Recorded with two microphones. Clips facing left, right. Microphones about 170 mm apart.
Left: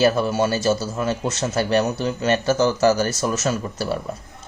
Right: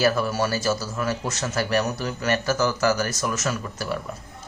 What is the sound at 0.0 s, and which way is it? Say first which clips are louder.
A man's voice: left 4 dB; 25° left (ahead or behind).